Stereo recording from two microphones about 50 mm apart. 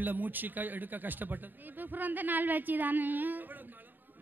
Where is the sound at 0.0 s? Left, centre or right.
Right.